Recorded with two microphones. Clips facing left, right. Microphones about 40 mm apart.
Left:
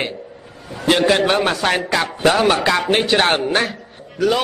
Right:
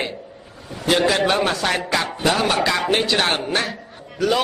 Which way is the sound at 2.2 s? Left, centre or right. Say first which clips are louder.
Left 5 dB; left.